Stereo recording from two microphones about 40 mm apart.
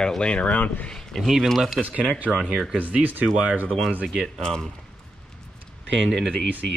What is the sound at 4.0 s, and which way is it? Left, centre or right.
Speech, centre.